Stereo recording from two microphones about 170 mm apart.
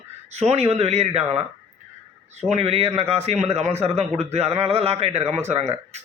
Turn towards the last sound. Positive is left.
turn(degrees=-40)  # may be behind; listen again after turning